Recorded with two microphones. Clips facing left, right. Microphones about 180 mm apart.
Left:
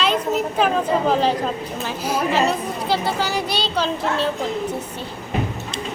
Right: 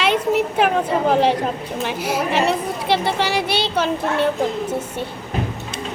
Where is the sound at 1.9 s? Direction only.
70° right (ahead or behind).